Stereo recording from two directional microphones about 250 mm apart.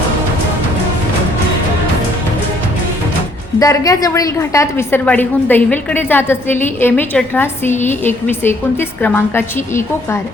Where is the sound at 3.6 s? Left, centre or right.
Centre.